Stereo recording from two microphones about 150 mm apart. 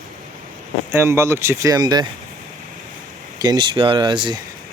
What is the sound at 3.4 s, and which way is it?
Speech, 30° right (ahead or behind).